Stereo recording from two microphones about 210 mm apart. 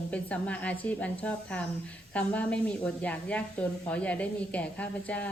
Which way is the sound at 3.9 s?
5° left (ahead or behind).